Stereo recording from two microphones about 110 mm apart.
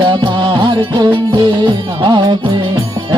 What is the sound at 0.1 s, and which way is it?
Music, 45° right (ahead or behind).